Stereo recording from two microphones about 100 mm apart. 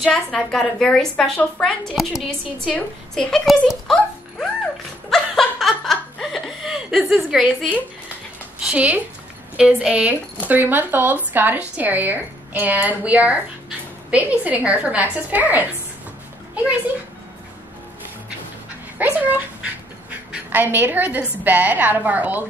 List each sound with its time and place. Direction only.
0.0 s a woman's voice: 5° left (ahead or behind)
5.1 s laughter: 5° left (ahead or behind)
8.5 s speech: 10° right (ahead or behind)
19.1 s speech: 15° right (ahead or behind)